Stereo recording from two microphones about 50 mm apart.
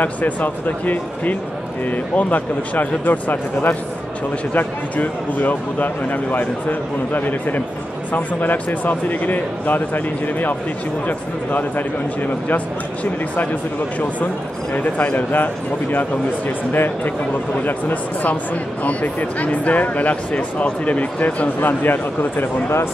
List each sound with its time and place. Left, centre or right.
0.0 s speech: left
18.3 s speech: left
21.5 s speech: left